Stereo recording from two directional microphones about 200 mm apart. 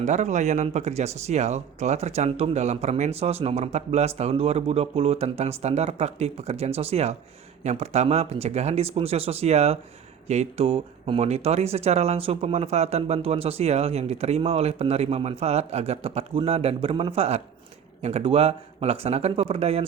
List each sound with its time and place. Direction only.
0.0 s speech: 35° right (ahead or behind)